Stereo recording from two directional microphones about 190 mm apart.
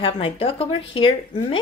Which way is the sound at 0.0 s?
30° left (ahead or behind).